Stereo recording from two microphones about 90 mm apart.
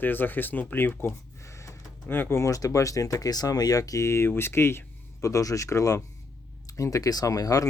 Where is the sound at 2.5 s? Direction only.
35° left (ahead or behind).